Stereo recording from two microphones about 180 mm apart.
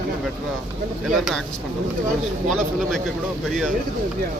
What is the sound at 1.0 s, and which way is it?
Speech, centre (ahead or behind).